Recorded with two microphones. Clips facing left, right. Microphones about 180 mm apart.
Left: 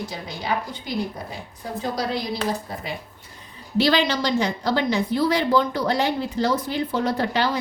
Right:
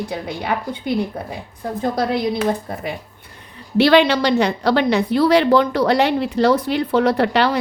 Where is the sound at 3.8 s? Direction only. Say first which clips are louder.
Right 7 dB; 65° right (ahead or behind).